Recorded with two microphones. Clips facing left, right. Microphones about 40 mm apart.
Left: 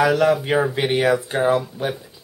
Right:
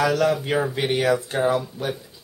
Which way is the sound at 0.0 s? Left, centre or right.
Centre.